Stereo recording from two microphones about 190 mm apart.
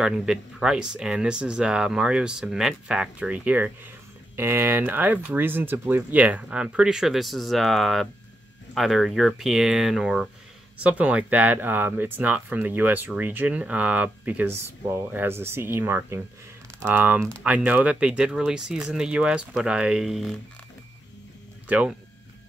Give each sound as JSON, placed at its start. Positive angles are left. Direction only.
{"t": 0.0, "sound": "speech", "side_deg": -5}
{"t": 21.6, "sound": "speech", "side_deg": -5}